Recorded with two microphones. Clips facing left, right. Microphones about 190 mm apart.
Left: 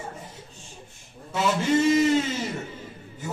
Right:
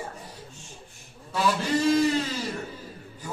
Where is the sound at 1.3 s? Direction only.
25° left (ahead or behind).